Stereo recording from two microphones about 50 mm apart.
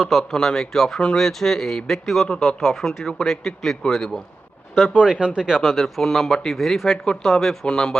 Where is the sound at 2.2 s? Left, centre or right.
Centre.